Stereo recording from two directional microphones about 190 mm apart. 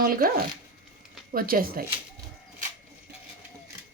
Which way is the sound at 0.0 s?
50° right (ahead or behind).